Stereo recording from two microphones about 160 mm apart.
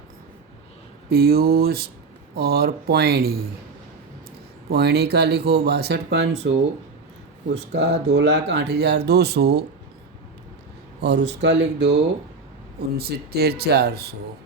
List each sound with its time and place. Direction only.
1.1 s speech: 70° right (ahead or behind)
4.7 s speech: 85° right
11.0 s speech: 90° right
13.0 s speech: 75° right (ahead or behind)